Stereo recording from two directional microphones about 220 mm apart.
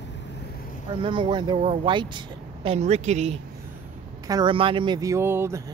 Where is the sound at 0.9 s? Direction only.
20° right (ahead or behind).